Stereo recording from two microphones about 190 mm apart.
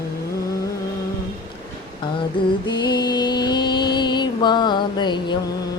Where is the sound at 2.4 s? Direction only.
25° left (ahead or behind).